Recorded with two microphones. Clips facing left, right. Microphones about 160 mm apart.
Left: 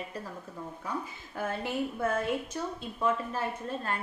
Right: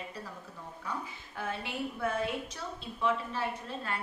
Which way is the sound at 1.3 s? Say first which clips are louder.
Left 5 dB; 45° left (ahead or behind).